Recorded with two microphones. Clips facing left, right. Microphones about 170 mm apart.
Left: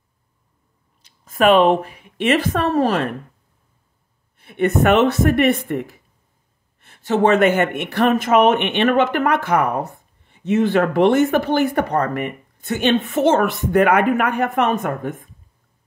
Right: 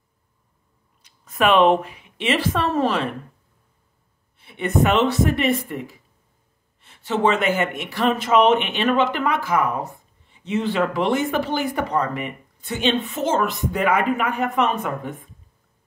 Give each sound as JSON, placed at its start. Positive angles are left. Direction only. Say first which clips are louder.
{"t": 1.3, "sound": "a woman's voice", "louder": "left 3 dB", "side_deg": 40}
{"t": 4.4, "sound": "speech", "louder": "left 3 dB", "side_deg": 50}
{"t": 6.8, "sound": "speech", "louder": "left 4 dB", "side_deg": 45}
{"t": 8.1, "sound": "speech", "louder": "left 1 dB", "side_deg": 50}